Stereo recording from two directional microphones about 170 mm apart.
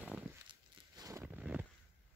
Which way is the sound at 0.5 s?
20° right (ahead or behind).